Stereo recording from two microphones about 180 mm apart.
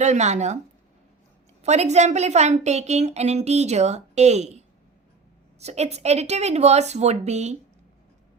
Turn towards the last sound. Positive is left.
turn(degrees=-40)  # may be behind; listen again after turning